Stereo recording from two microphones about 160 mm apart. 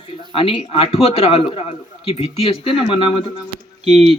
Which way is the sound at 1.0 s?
40° left (ahead or behind).